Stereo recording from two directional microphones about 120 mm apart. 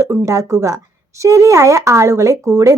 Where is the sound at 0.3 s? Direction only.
25° right (ahead or behind).